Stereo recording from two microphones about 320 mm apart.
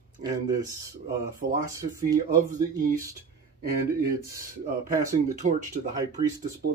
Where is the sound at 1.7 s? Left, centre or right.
Centre.